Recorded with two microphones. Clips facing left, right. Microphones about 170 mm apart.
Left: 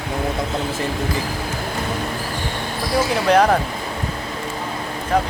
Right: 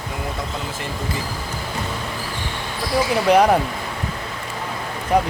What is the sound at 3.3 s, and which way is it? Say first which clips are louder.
Speech: even; 10° right (ahead or behind).